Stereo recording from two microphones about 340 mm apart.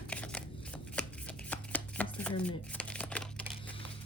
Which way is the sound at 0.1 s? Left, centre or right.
Centre.